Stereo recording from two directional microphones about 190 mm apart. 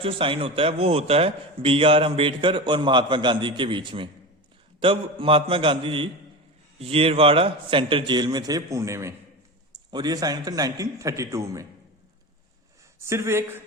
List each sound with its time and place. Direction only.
0.0 s a man's voice: 30° right (ahead or behind)
13.0 s speech: 15° right (ahead or behind)